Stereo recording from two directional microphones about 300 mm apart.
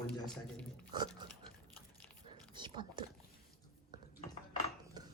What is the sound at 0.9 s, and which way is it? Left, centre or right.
Speech, centre.